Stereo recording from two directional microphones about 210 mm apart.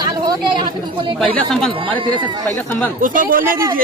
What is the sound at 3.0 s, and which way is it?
Speech, 40° right (ahead or behind).